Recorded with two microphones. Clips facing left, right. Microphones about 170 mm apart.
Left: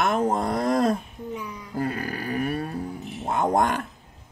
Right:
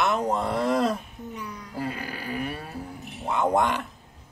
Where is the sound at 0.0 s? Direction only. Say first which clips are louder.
Left 2 dB; 50° left (ahead or behind).